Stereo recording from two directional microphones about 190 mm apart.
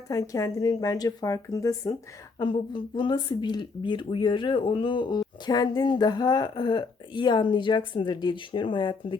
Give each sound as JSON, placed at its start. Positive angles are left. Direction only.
{"t": 0.1, "sound": "speech", "side_deg": 20}